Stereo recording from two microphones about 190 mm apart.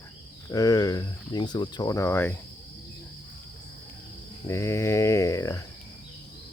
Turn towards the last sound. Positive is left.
turn(degrees=15)  # may be behind; listen again after turning